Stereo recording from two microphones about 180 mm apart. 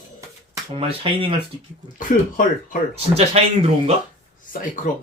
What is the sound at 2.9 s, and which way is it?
Speech, 35° right (ahead or behind).